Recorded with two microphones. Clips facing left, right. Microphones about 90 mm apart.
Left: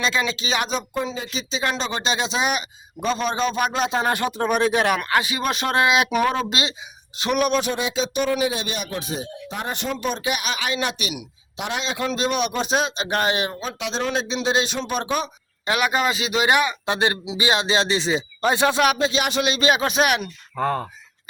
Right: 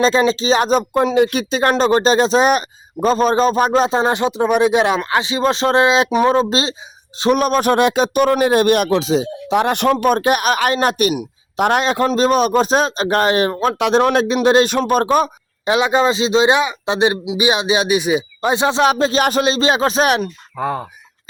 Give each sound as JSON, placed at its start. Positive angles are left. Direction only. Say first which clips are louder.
{"t": 0.0, "sound": "speech", "louder": "right 9 dB", "side_deg": -35}
{"t": 1.0, "sound": "speech", "louder": "right 14 dB", "side_deg": -70}
{"t": 7.7, "sound": "speech", "louder": "right 10 dB", "side_deg": -60}
{"t": 15.6, "sound": "speech", "louder": "right 6 dB", "side_deg": -25}
{"t": 20.6, "sound": "speech", "louder": "right 2 dB", "side_deg": -5}